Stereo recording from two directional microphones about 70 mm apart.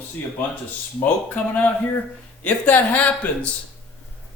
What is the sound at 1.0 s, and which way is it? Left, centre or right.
Speech, left.